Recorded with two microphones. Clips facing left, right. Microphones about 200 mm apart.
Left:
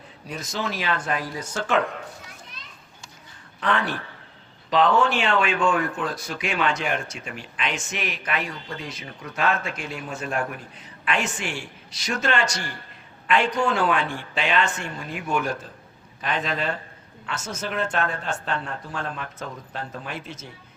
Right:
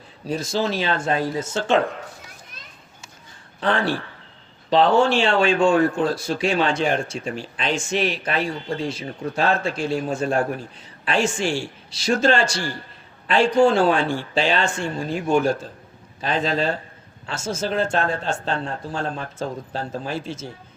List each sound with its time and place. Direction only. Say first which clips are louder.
0.3 s a man's voice: right 7 dB; 30° right (ahead or behind)
3.6 s a man's voice: right 4 dB; 30° right (ahead or behind)